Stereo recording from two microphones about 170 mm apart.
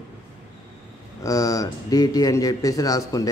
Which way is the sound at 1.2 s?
20° left (ahead or behind).